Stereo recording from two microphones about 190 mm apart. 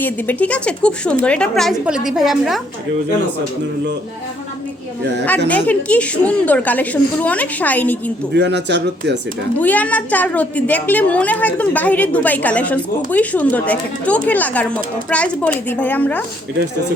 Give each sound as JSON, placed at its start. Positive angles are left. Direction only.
{"t": 0.0, "sound": "a woman's voice", "side_deg": 10}
{"t": 5.5, "sound": "a woman's voice", "side_deg": 10}
{"t": 8.3, "sound": "speech", "side_deg": -65}
{"t": 9.6, "sound": "a woman's voice", "side_deg": 10}